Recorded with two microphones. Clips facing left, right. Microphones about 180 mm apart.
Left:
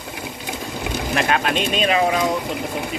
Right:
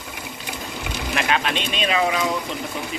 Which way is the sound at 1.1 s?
40° left (ahead or behind).